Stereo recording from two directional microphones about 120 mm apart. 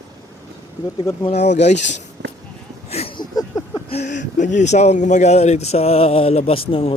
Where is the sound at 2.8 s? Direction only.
60° left (ahead or behind).